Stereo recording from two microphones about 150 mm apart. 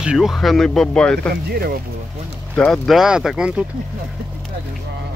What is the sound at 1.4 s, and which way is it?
Speech, 90° right.